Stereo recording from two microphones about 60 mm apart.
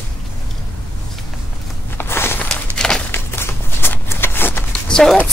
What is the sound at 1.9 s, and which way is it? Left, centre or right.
Walk, left.